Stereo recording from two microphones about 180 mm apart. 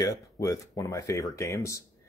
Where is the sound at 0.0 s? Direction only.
20° left (ahead or behind).